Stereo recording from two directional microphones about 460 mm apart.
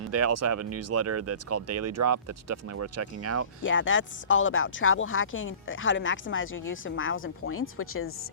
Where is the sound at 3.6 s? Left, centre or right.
Left.